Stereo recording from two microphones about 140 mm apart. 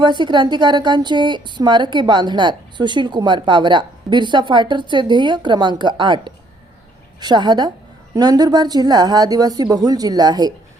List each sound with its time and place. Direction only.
0.0 s a woman's voice: 35° right (ahead or behind)